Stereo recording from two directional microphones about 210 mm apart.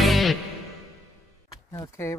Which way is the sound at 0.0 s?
Centre (ahead or behind).